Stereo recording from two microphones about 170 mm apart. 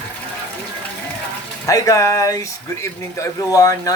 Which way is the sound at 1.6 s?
20° left (ahead or behind).